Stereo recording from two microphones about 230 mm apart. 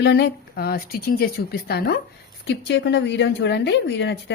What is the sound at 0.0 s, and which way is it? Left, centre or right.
Speech, left.